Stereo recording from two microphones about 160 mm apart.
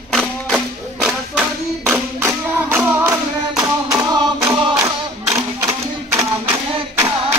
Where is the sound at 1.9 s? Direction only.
15° right (ahead or behind).